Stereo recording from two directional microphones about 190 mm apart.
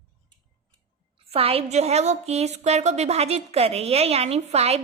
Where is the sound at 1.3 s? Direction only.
30° right (ahead or behind).